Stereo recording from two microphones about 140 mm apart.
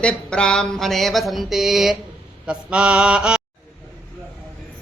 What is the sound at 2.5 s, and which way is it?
Mantra, 10° right (ahead or behind).